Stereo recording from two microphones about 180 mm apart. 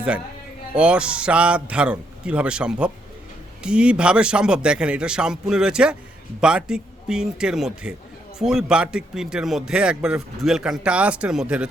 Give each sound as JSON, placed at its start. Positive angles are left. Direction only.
{"t": 0.8, "sound": "speech", "side_deg": -5}